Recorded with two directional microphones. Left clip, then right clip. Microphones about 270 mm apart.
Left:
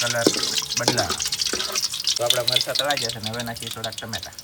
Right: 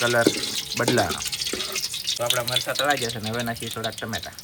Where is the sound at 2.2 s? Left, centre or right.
Centre.